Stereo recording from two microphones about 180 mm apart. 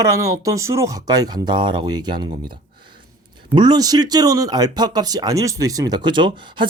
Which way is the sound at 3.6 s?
25° right (ahead or behind).